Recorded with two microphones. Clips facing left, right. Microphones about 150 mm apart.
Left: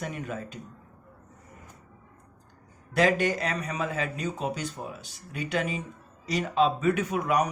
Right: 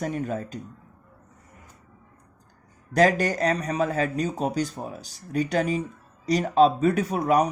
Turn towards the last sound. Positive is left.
turn(degrees=-35)  # may be behind; listen again after turning